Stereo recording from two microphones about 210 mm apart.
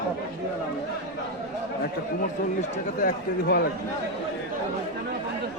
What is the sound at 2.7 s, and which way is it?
Speech, 40° left (ahead or behind).